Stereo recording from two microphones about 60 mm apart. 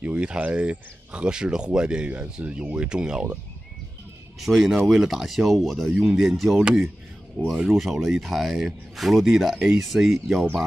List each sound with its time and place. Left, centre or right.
0.0 s speech: centre
4.4 s speech: centre